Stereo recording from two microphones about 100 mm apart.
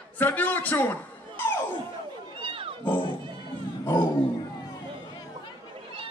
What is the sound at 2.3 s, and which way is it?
Roaring cats, 65° right (ahead or behind).